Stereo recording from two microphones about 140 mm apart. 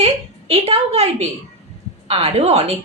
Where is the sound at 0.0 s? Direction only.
45° right (ahead or behind).